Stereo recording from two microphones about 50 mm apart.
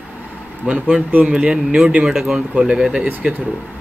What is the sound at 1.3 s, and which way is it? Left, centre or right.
Speech, centre.